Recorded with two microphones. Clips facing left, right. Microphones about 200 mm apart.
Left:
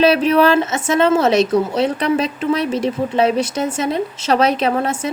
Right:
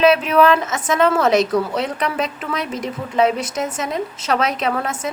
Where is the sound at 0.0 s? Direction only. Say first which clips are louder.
Left 1 dB; 35° left (ahead or behind).